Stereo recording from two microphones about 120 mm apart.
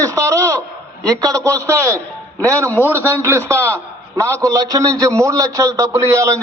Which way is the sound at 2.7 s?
15° left (ahead or behind).